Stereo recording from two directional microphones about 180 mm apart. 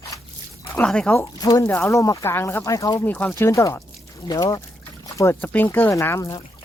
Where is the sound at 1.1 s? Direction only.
20° left (ahead or behind).